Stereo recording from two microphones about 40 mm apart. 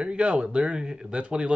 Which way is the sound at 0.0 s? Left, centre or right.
Right.